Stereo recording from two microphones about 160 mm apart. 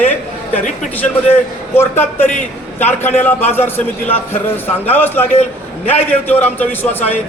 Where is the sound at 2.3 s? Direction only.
50° left (ahead or behind).